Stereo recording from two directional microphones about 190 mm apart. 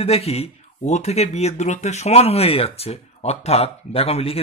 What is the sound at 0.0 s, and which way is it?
Speech, 30° left (ahead or behind).